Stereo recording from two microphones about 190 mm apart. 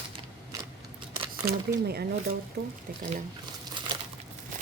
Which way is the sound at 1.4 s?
15° right (ahead or behind).